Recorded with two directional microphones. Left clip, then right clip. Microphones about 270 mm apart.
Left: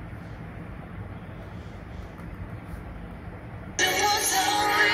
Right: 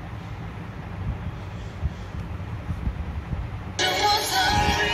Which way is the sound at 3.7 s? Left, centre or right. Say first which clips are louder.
Right 2 dB; left.